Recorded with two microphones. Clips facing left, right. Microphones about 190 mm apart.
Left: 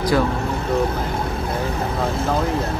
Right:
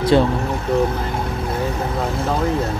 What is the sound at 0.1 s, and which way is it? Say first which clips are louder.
Speech: right 4 dB; 25° right (ahead or behind).